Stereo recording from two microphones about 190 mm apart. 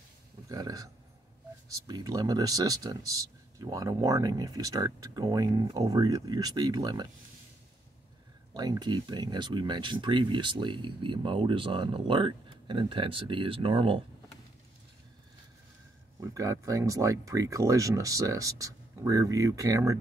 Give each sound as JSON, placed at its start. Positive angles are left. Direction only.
{"t": 0.5, "sound": "a sound", "side_deg": -20}
{"t": 1.7, "sound": "speech", "side_deg": -20}
{"t": 8.5, "sound": "speech", "side_deg": -20}
{"t": 16.2, "sound": "speech", "side_deg": -15}